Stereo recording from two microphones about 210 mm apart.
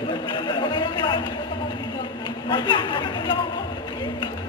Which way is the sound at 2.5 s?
25° left (ahead or behind).